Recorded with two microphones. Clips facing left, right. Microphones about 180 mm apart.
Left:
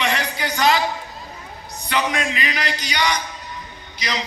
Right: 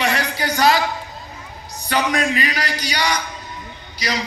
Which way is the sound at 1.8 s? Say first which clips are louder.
Right 3 dB; 35° right (ahead or behind).